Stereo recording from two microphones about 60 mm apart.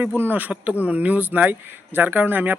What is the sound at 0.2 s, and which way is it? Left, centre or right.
Speech, right.